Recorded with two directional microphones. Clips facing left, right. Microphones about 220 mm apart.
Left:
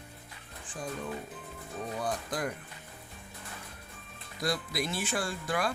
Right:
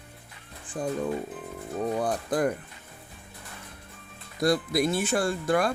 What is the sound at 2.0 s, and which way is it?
Music, 55° right (ahead or behind).